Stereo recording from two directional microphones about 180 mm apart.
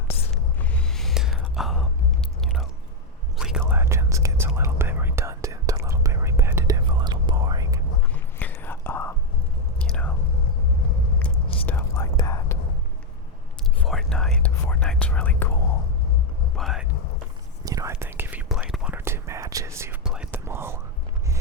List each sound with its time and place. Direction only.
0.6 s a sound: 5° left (ahead or behind)
2.4 s chewing: centre (ahead or behind)
3.3 s whispering: 5° right (ahead or behind); by 7.8 s 20° right (ahead or behind)
8.1 s whispering: 10° left (ahead or behind)
9.7 s chewing: 5° left (ahead or behind)
11.6 s whispering: 10° left (ahead or behind)
13.8 s whispering: centre (ahead or behind)
16.6 s a sound: centre (ahead or behind)
17.7 s whispering: 15° right (ahead or behind)